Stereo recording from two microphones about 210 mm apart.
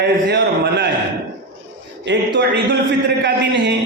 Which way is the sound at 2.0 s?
55° right (ahead or behind).